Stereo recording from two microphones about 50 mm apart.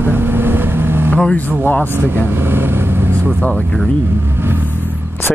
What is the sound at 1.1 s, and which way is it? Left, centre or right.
Speech, left.